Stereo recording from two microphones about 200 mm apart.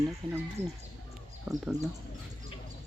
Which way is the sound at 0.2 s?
25° right (ahead or behind).